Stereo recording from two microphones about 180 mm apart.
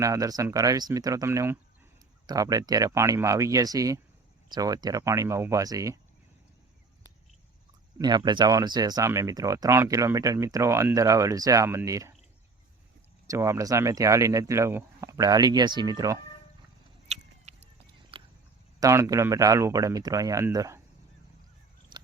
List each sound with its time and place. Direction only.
0.0 s speech: 20° right (ahead or behind)
7.9 s speech: 25° right (ahead or behind)
13.2 s speech: 15° right (ahead or behind)
18.1 s a sound: 30° right (ahead or behind)
18.8 s speech: 15° right (ahead or behind)
21.9 s biting: 25° right (ahead or behind)